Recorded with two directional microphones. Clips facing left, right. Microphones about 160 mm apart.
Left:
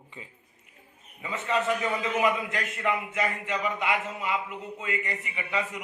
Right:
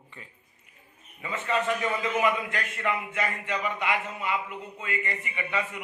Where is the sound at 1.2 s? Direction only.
10° left (ahead or behind).